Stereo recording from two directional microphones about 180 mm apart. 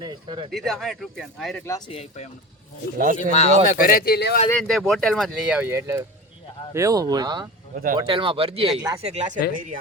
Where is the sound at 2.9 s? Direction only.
50° right (ahead or behind).